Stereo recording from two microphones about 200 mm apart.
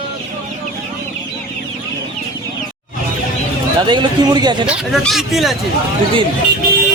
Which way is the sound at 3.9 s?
20° right (ahead or behind).